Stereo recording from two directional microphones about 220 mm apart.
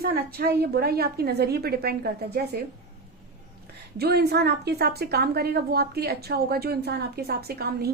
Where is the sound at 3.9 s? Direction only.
45° right (ahead or behind).